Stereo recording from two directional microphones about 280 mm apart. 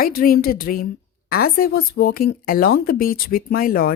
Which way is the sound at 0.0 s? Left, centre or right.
Left.